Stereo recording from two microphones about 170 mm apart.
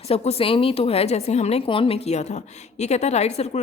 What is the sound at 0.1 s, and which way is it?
A woman's voice, 35° left (ahead or behind).